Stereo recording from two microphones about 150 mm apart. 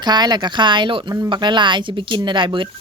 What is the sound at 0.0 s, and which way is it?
Speech, 30° right (ahead or behind).